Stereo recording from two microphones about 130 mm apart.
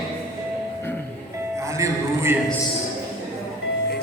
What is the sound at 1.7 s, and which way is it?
Speech, 20° right (ahead or behind).